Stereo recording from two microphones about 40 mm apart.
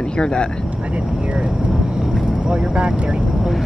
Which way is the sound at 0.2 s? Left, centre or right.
Left.